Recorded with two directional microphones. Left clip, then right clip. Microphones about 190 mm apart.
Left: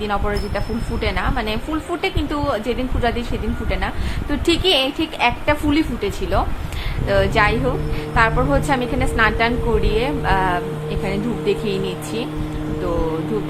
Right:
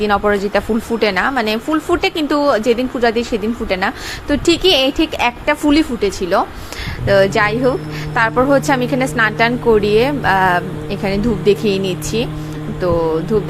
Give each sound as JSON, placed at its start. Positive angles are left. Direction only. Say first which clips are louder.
{"t": 0.0, "sound": "a woman's voice", "louder": "right 8 dB", "side_deg": -40}